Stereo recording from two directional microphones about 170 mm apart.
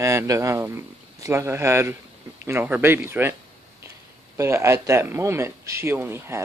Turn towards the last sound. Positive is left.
turn(degrees=-15)  # may be behind; listen again after turning